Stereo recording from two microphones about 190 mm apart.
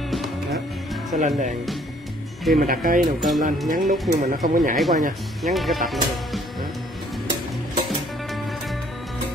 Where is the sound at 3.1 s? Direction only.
Centre (ahead or behind).